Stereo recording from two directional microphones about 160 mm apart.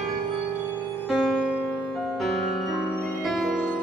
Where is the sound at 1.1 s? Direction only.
Centre (ahead or behind).